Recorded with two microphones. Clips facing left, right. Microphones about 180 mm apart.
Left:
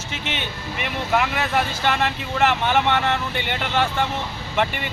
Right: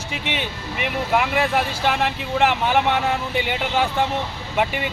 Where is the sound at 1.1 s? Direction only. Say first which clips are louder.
Right 1 dB; 5° right (ahead or behind).